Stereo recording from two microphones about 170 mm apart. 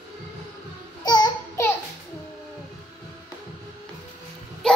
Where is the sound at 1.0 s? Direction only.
25° left (ahead or behind).